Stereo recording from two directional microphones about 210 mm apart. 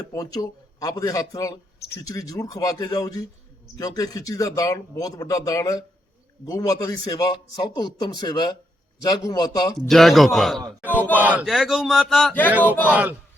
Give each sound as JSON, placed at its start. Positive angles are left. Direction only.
{"t": 0.1, "sound": "a man's voice", "side_deg": 15}
{"t": 9.7, "sound": "speech", "side_deg": 0}
{"t": 12.9, "sound": "speech", "side_deg": -5}